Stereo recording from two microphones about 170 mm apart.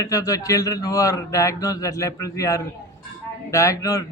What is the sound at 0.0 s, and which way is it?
A man's voice, 20° left (ahead or behind).